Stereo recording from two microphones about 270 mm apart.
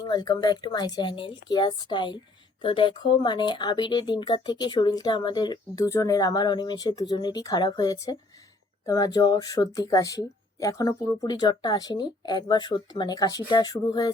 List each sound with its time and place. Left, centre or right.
0.0 s speech: centre